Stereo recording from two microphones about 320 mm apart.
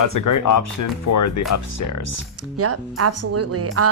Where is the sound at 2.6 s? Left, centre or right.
Right.